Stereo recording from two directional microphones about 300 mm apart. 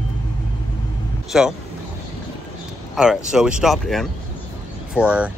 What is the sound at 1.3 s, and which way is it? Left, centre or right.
Speech, centre.